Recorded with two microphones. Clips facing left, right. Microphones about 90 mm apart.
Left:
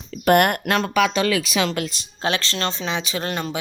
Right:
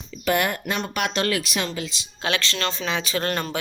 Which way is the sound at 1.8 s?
45° left (ahead or behind).